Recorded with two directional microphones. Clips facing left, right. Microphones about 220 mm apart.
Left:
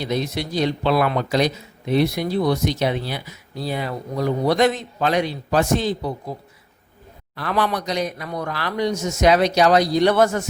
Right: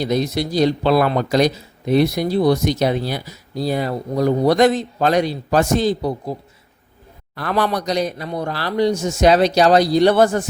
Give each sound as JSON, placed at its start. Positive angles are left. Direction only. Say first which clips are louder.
{"t": 0.0, "sound": "a man's voice", "louder": "right 4 dB", "side_deg": -40}
{"t": 7.3, "sound": "a man's voice", "louder": "right 2 dB", "side_deg": -45}